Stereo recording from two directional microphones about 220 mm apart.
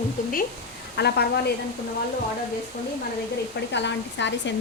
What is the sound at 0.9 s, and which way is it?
Speech, 45° left (ahead or behind).